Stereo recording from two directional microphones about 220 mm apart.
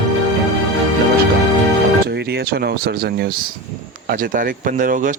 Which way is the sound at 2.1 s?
45° right (ahead or behind).